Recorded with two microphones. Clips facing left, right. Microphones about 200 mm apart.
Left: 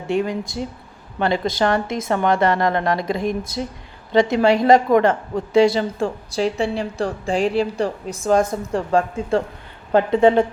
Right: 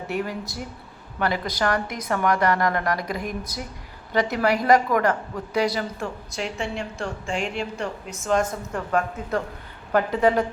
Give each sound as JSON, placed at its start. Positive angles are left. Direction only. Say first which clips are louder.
{"t": 0.1, "sound": "a woman's voice", "louder": "left 8 dB", "side_deg": 25}